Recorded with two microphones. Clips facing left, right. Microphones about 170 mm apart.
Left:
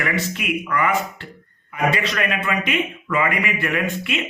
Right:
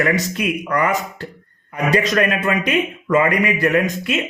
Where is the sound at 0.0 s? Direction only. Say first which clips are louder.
Right 5 dB; 40° right (ahead or behind).